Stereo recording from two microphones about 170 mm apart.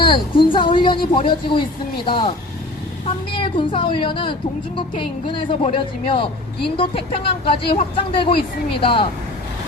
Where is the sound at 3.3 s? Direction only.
30° left (ahead or behind).